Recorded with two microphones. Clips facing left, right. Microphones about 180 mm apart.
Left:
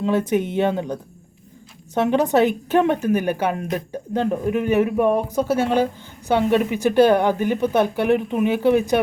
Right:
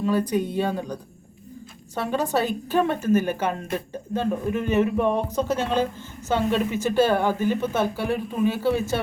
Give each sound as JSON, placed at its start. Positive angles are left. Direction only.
{"t": 0.0, "sound": "speech", "side_deg": 25}
{"t": 2.0, "sound": "a woman's voice", "side_deg": 20}